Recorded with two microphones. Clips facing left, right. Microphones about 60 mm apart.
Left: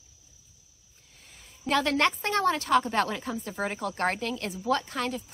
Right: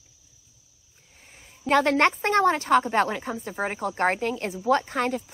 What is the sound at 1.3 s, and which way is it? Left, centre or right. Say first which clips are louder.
A woman's voice: right 5 dB; right.